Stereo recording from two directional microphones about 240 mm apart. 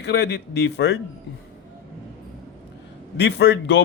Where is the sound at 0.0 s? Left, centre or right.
Left.